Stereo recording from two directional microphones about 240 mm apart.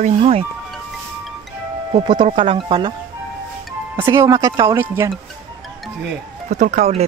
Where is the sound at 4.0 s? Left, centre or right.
Centre.